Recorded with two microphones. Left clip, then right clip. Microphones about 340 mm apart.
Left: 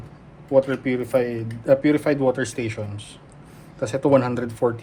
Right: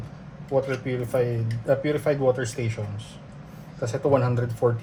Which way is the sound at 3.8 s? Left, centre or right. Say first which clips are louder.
Left 4 dB; left.